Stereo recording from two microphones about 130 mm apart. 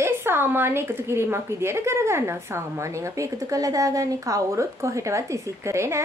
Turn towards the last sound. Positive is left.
turn(degrees=-20)  # may be behind; listen again after turning